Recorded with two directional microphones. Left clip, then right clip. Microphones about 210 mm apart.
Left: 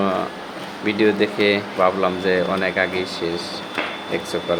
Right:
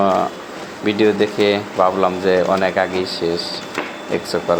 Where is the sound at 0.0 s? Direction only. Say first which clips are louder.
Right 6 dB; 5° right (ahead or behind).